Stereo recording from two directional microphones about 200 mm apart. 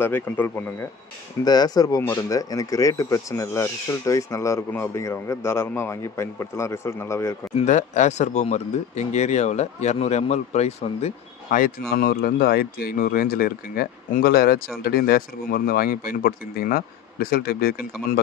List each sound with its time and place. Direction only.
0.0 s speech: 10° left (ahead or behind)
7.5 s speech: 35° left (ahead or behind)
11.9 s speech: 50° left (ahead or behind)